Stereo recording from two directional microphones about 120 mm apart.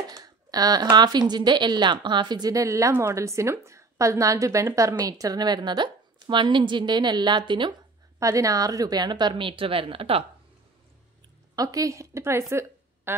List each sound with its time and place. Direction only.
0.1 s speech: 30° right (ahead or behind)
8.2 s speech: 25° right (ahead or behind); by 10.2 s 50° right (ahead or behind)
11.5 s speech: 30° right (ahead or behind)